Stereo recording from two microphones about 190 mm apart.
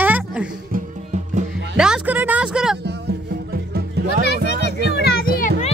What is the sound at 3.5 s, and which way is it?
Music, 55° right (ahead or behind).